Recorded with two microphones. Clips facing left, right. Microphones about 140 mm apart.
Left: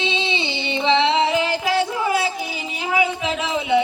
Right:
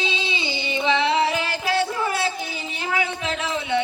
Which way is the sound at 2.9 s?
15° left (ahead or behind).